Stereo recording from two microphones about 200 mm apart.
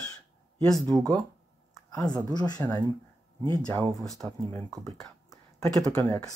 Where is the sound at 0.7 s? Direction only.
Centre (ahead or behind).